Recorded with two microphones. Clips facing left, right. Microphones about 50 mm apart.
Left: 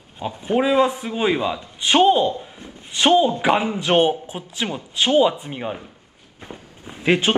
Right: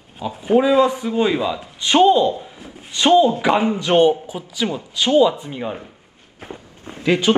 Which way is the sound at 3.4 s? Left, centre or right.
Centre.